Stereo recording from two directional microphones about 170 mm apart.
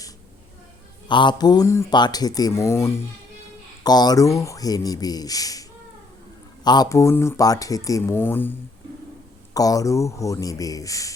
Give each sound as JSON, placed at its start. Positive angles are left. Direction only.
{"t": 1.0, "sound": "speech", "side_deg": 25}
{"t": 6.7, "sound": "speech", "side_deg": 20}
{"t": 9.6, "sound": "speech", "side_deg": 20}